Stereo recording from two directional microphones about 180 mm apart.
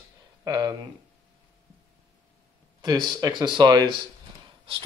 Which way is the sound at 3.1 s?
20° right (ahead or behind).